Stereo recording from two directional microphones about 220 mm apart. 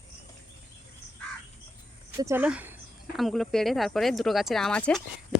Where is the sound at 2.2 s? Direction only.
10° right (ahead or behind).